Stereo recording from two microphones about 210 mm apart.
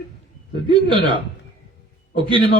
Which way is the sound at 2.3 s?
25° right (ahead or behind).